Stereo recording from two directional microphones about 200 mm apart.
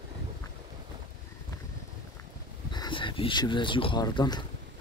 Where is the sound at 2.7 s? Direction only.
25° left (ahead or behind).